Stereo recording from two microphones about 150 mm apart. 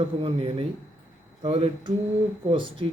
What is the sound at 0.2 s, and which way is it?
A man's voice, 40° right (ahead or behind).